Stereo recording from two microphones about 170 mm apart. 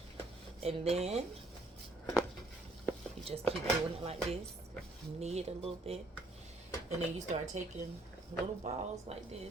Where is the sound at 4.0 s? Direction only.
35° right (ahead or behind).